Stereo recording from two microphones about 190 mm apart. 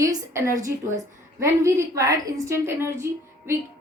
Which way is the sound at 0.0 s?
15° right (ahead or behind).